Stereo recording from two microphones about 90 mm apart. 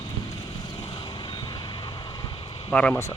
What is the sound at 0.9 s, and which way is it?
Vehicle, 55° left (ahead or behind).